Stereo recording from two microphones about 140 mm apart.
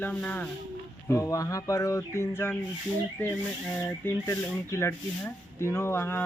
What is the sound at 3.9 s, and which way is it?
Speech, 20° left (ahead or behind).